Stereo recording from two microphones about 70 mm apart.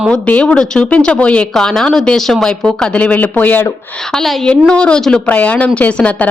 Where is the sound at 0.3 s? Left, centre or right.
Centre.